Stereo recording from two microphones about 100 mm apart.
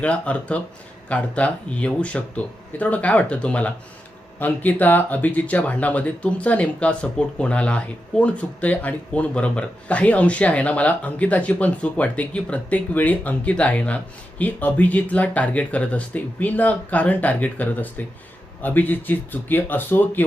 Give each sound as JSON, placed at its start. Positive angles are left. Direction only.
{"t": 0.0, "sound": "speech", "side_deg": 15}